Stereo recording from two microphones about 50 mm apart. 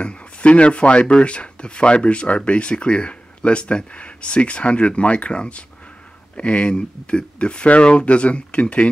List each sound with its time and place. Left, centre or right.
0.0 s speech: left